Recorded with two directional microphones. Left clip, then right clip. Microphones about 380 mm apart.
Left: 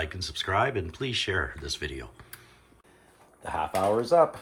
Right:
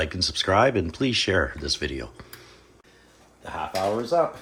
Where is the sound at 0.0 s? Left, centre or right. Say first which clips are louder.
Right 7 dB; centre.